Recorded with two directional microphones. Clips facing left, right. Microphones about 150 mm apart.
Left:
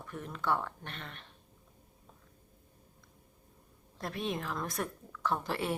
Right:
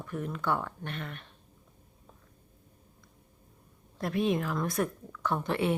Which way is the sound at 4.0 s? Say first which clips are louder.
Right 8 dB; centre (ahead or behind).